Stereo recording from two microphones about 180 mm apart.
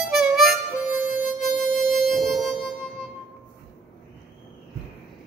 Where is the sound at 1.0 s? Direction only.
45° left (ahead or behind).